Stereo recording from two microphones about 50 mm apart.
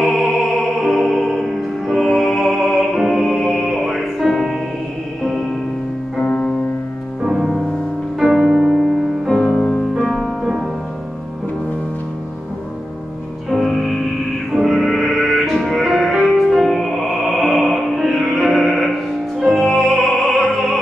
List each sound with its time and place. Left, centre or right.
0.0 s music: centre
7.2 s music: centre
9.3 s music: centre
13.5 s music: centre